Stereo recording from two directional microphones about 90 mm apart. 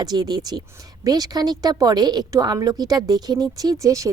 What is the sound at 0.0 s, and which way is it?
A woman's voice, 45° right (ahead or behind).